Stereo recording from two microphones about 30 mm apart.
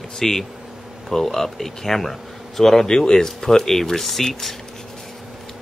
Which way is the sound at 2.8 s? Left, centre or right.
Left.